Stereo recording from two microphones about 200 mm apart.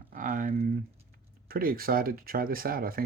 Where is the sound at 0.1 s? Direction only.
40° right (ahead or behind).